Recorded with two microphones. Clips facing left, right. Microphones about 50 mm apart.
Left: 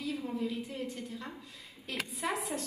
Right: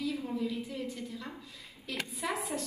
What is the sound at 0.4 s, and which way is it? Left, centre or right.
Speech, left.